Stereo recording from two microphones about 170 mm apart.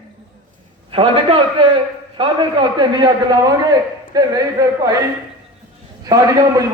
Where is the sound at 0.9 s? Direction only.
35° right (ahead or behind).